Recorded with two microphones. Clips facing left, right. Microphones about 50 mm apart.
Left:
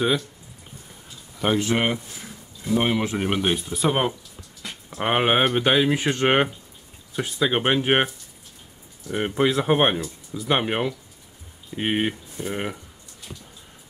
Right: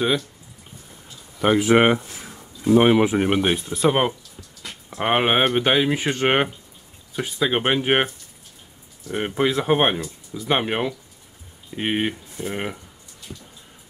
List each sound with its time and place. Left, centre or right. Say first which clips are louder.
1.4 s speech: right 5 dB; centre
1.8 s speech: right 7 dB; right
2.7 s speech: right 7 dB; right
3.1 s speech: right 3 dB; centre
3.6 s speech: right 3 dB; centre